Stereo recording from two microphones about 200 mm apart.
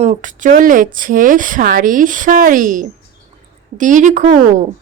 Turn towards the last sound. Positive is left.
turn(degrees=-40)  # may be behind; listen again after turning